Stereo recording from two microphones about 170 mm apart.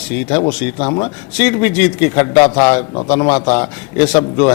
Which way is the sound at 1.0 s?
10° left (ahead or behind).